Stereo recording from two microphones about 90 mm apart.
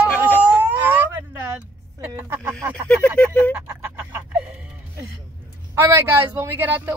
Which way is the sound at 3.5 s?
25° right (ahead or behind).